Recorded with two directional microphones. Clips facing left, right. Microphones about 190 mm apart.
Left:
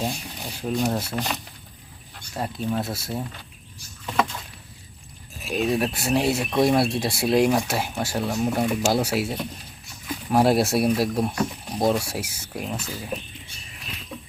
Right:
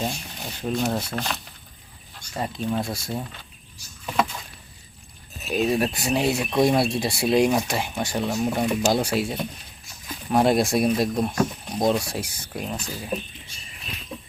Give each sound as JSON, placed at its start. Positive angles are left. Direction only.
{"t": 0.0, "sound": "a sound", "side_deg": 5}
{"t": 0.9, "sound": "speech", "side_deg": 10}
{"t": 5.5, "sound": "speech", "side_deg": 0}